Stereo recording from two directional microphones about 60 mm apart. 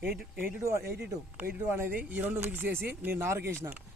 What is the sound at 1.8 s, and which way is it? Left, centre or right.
Speech, right.